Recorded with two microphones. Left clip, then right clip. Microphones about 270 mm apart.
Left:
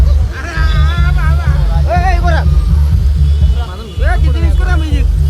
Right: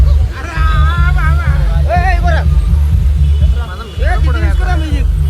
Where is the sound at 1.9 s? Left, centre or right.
Left.